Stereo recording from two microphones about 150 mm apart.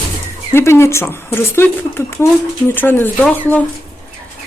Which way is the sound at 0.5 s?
15° left (ahead or behind).